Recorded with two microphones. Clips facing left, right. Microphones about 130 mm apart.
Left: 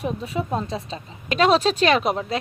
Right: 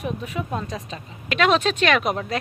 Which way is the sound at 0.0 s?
30° left (ahead or behind).